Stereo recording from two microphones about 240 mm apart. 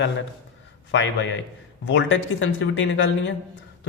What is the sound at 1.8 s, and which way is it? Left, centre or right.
A man's voice, left.